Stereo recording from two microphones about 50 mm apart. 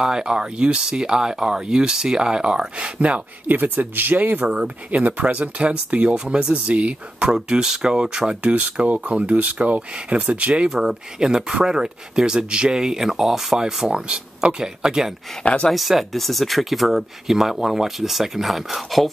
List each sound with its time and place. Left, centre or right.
0.0 s speech: centre
3.4 s speech: right
4.5 s speech: right
10.7 s speech: centre
15.4 s speech: left
15.7 s speech: centre